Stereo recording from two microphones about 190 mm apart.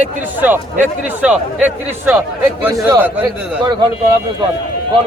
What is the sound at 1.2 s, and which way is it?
Speech, 5° right (ahead or behind).